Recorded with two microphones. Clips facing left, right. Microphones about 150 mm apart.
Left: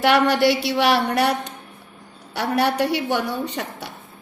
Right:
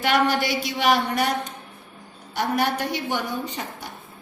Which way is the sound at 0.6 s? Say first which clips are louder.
Left 3 dB; 65° left (ahead or behind).